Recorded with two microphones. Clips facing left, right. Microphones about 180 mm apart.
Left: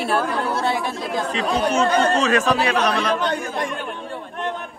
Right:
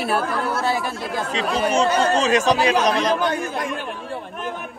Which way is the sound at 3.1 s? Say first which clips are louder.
Right 1 dB; 5° right (ahead or behind).